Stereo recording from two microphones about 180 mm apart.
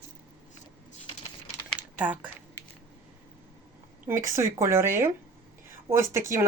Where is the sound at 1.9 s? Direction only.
10° right (ahead or behind).